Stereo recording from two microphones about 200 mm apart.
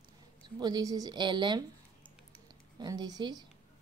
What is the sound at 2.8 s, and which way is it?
Speech, 20° right (ahead or behind).